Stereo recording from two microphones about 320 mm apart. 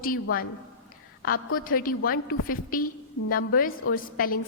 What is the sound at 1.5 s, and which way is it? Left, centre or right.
A woman's voice, left.